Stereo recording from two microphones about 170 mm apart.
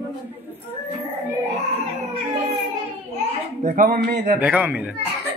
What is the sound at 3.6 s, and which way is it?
Speech, 50° right (ahead or behind).